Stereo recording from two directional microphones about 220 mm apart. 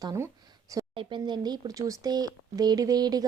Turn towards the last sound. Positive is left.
turn(degrees=-20)  # may be behind; listen again after turning